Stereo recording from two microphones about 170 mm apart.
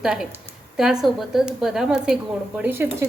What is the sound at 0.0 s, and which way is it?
A woman's voice, 5° right (ahead or behind).